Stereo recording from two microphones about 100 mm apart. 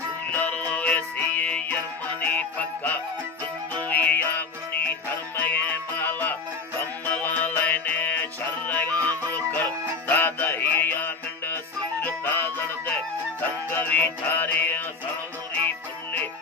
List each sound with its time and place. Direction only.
0.3 s music: 15° left (ahead or behind)
2.2 s jingle bell: 15° left (ahead or behind)
3.7 s music: 15° left (ahead or behind)